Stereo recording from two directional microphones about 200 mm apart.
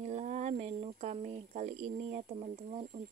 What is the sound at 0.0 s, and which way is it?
Speech, 35° right (ahead or behind).